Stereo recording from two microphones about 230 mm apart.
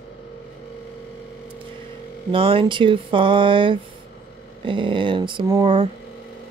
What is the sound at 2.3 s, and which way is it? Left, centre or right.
Speech, right.